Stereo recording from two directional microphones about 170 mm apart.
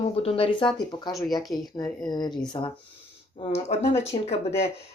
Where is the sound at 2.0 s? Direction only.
25° left (ahead or behind).